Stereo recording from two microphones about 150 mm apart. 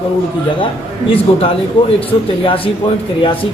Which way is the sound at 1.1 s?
40° left (ahead or behind).